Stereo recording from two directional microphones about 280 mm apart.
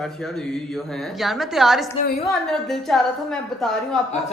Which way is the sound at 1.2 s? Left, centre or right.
Centre.